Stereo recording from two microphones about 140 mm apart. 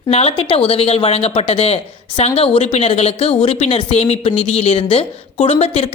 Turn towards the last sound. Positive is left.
turn(degrees=45)  # may be behind; listen again after turning